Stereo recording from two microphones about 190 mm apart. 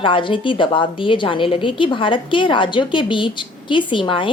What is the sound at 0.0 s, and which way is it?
A woman's voice, 25° left (ahead or behind).